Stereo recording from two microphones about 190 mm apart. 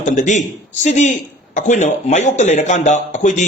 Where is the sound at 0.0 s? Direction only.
40° left (ahead or behind).